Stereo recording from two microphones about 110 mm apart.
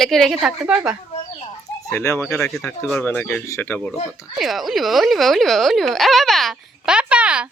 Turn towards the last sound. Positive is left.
turn(degrees=-10)  # may be behind; listen again after turning